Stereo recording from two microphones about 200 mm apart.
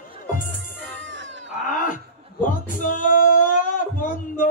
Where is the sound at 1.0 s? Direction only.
65° right (ahead or behind).